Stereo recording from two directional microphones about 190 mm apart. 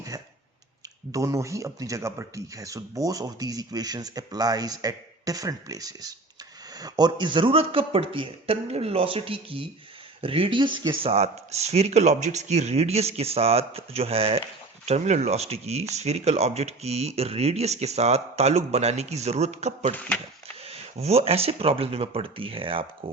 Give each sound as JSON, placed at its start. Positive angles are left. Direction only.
{"t": 1.1, "sound": "a man's voice", "side_deg": -15}